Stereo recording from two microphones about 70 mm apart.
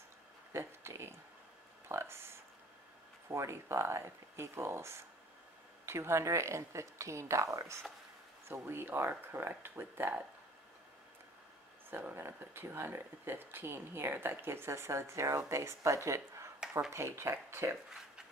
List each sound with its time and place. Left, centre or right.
0.5 s speech: right
8.5 s speech: right
11.9 s speech: right